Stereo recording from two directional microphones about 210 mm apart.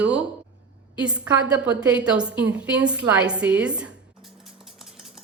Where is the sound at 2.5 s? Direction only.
5° right (ahead or behind).